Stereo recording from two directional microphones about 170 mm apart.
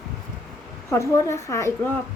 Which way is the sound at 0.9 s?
15° left (ahead or behind).